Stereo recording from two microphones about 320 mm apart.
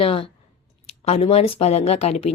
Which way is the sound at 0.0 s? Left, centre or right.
Centre.